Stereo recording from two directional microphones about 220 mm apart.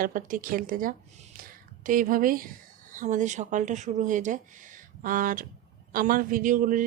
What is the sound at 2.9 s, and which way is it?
Speech, 35° right (ahead or behind).